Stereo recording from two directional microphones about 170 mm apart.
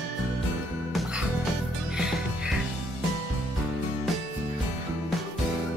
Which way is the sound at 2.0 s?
5° right (ahead or behind).